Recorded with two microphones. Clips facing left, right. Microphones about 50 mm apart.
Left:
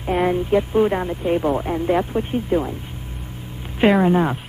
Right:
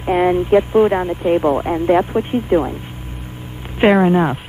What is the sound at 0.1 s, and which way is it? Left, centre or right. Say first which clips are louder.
Speech: right 5 dB; centre.